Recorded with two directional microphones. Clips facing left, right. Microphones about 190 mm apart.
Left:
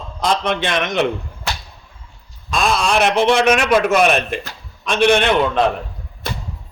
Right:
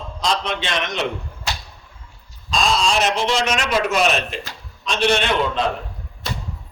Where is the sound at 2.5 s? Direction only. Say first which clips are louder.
Left 2 dB; 55° left (ahead or behind).